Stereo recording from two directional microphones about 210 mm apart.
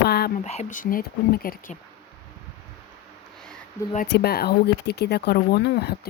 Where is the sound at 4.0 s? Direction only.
50° left (ahead or behind).